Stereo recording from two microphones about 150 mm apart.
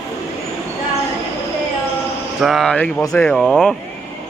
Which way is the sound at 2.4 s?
Centre (ahead or behind).